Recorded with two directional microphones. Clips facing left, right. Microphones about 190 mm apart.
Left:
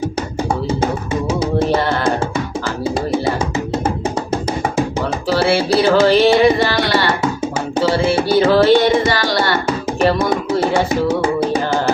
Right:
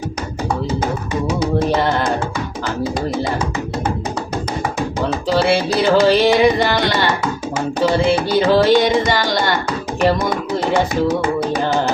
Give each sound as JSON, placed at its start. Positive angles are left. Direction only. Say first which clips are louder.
{"t": 5.3, "sound": "music", "louder": "left 2 dB", "side_deg": -15}
{"t": 11.1, "sound": "music", "louder": "left 2 dB", "side_deg": 30}